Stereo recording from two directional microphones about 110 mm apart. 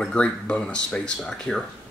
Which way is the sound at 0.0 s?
10° left (ahead or behind).